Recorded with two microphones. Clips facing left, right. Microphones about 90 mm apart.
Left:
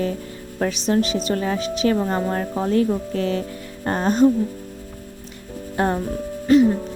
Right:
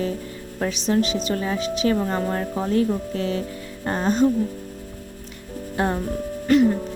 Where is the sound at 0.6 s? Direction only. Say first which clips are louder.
Left 1 dB; 40° left (ahead or behind).